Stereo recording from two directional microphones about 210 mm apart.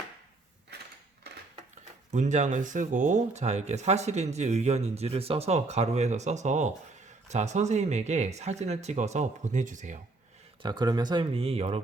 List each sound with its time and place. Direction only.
2.0 s speech: 35° right (ahead or behind)
10.6 s speech: 20° right (ahead or behind)